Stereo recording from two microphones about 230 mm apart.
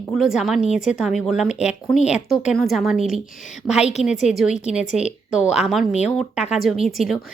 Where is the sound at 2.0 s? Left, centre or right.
Left.